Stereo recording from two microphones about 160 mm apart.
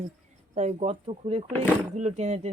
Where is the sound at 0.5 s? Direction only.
45° right (ahead or behind).